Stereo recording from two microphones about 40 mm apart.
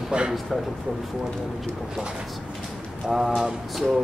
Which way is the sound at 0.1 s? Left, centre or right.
Right.